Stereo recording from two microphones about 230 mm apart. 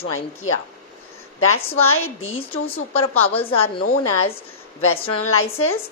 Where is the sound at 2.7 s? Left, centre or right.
Left.